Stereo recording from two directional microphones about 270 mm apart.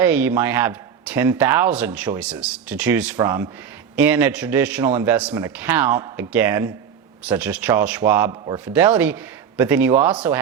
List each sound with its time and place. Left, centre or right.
0.0 s a man's voice: centre
8.6 s a man's voice: centre